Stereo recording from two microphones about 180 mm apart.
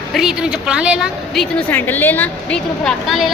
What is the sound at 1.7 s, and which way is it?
A woman's voice, 10° left (ahead or behind).